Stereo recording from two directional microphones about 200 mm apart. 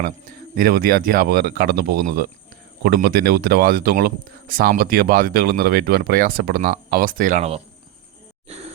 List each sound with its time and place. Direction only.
0.5 s speech: 50° right (ahead or behind)